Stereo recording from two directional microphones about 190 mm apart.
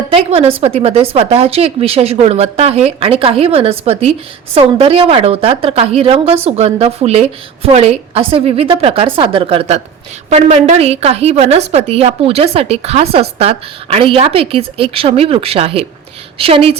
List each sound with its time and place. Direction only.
0.1 s a woman's voice: 30° right (ahead or behind)